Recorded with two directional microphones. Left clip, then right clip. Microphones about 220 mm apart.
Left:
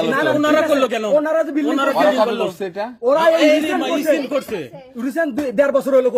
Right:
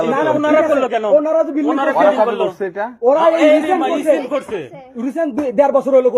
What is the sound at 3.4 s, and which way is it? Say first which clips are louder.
Speech: right 3 dB; 70° left (ahead or behind).